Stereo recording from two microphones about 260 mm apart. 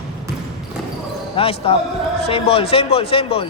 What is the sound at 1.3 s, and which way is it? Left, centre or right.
Speech, left.